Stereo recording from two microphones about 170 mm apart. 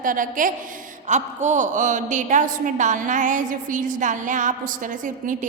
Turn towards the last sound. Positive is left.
turn(degrees=-50)  # may be behind; listen again after turning